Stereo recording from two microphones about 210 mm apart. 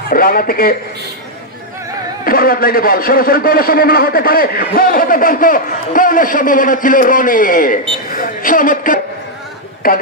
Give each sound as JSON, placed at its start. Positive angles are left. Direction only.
{"t": 0.1, "sound": "a man's voice", "side_deg": 45}
{"t": 2.2, "sound": "a man's voice", "side_deg": 45}